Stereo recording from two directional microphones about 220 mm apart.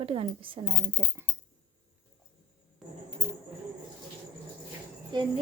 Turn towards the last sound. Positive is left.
turn(degrees=-20)  # may be behind; listen again after turning